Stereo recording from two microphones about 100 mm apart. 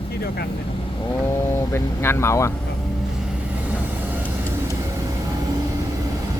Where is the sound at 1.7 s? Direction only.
25° left (ahead or behind).